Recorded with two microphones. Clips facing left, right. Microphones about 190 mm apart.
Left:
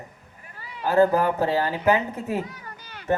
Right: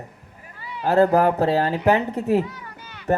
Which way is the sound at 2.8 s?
35° left (ahead or behind).